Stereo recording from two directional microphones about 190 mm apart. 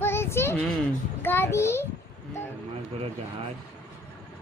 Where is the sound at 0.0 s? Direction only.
15° left (ahead or behind).